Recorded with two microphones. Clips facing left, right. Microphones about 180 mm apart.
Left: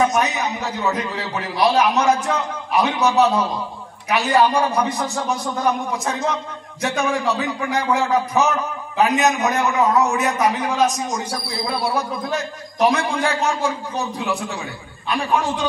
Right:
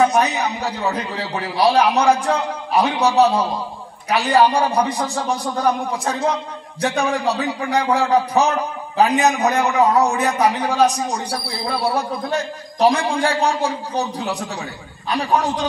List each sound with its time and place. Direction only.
0.1 s a man's voice: 35° right (ahead or behind)